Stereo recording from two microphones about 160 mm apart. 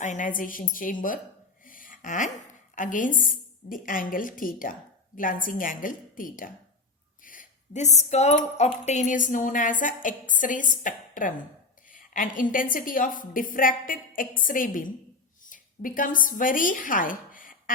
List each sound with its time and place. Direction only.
0.0 s speech: 50° left (ahead or behind)
1.6 s a sound: 60° left (ahead or behind)
2.7 s a woman's voice: 55° left (ahead or behind)